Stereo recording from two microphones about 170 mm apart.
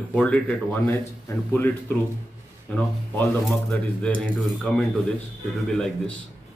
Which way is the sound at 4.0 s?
5° left (ahead or behind).